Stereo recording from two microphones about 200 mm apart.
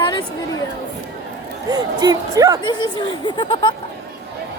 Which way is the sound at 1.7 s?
20° right (ahead or behind).